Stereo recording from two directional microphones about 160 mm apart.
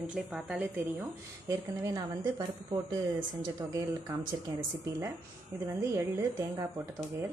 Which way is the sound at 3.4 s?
20° right (ahead or behind).